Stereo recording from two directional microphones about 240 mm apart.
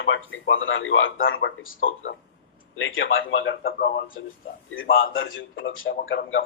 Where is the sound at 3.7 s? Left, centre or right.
Left.